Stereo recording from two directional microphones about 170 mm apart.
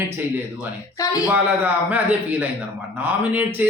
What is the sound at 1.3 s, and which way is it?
A man's voice, 10° right (ahead or behind).